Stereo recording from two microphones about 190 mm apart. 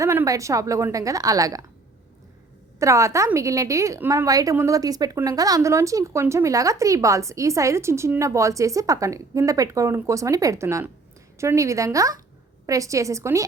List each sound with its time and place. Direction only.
0.0 s a woman's voice: 15° right (ahead or behind)
2.7 s a woman's voice: 15° right (ahead or behind)